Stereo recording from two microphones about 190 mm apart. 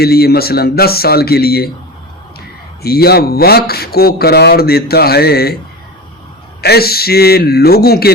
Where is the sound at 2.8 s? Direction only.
55° left (ahead or behind).